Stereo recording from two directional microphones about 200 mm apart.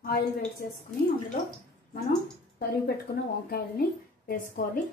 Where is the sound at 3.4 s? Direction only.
50° left (ahead or behind).